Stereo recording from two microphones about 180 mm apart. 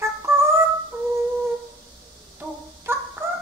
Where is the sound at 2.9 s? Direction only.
10° right (ahead or behind).